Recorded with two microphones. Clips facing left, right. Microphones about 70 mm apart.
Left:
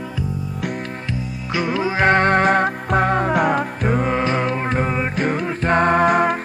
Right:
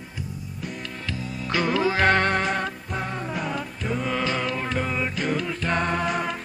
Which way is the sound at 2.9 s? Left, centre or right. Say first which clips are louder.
Left 12 dB; left.